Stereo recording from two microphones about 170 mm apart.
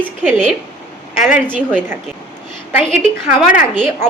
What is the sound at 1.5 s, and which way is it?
Speech, 10° right (ahead or behind).